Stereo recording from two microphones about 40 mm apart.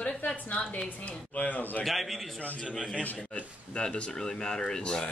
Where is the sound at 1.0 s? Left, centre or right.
Left.